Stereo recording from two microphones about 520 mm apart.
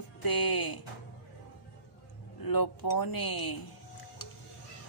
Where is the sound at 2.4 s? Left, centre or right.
Left.